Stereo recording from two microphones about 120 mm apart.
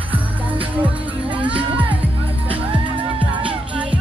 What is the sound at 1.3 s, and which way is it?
Music, 10° right (ahead or behind).